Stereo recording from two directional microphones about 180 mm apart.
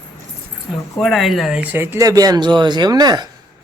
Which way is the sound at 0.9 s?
Centre (ahead or behind).